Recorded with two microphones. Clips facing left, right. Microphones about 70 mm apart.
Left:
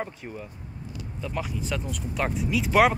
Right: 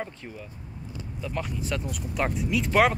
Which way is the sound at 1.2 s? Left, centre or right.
Centre.